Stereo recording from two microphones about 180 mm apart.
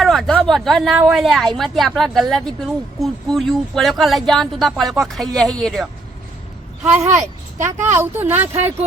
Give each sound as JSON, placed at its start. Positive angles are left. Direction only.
{"t": 0.0, "sound": "a sound", "side_deg": 0}
{"t": 0.4, "sound": "speech", "side_deg": 0}
{"t": 6.8, "sound": "speech", "side_deg": -10}
{"t": 7.1, "sound": "a woman's voice", "side_deg": -40}
{"t": 7.9, "sound": "speech", "side_deg": -10}